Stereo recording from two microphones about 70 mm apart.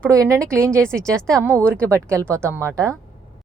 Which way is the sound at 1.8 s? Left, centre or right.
Right.